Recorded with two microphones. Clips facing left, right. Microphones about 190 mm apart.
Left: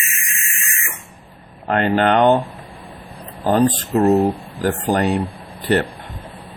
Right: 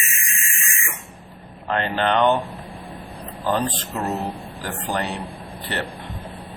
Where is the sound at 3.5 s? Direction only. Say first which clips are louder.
Left 8 dB; 45° left (ahead or behind).